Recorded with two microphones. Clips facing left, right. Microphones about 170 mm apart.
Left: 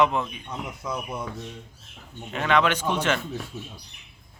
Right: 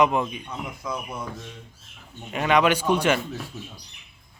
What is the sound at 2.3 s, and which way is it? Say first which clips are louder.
Speech: right 2 dB; 10° right (ahead or behind).